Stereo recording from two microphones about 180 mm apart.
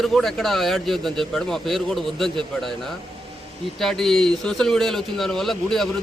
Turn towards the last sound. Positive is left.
turn(degrees=0)  # may be behind; listen again after turning